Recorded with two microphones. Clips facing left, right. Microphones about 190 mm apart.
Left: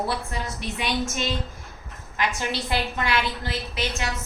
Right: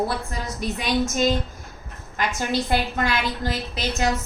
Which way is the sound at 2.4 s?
45° right (ahead or behind).